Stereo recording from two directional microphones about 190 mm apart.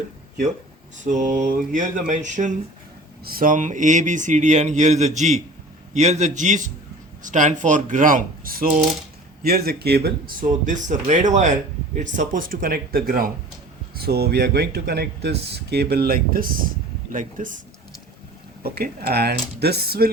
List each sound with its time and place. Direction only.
0.9 s speech: 40° right (ahead or behind); by 10.3 s 55° right (ahead or behind)
10.7 s speech: 40° right (ahead or behind)
18.6 s speech: 55° right (ahead or behind)